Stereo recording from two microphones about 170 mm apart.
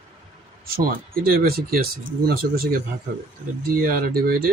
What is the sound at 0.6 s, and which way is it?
Speech, 60° right (ahead or behind).